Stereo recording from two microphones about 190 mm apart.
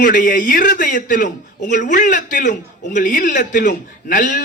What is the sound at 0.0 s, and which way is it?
A man's voice, 45° left (ahead or behind).